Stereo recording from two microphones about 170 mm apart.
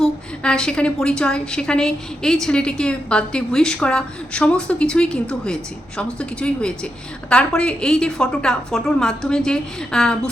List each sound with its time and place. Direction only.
0.0 s a woman's voice: 5° left (ahead or behind)